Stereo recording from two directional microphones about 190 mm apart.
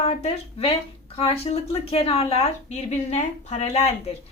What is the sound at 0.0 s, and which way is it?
Speech, 30° left (ahead or behind).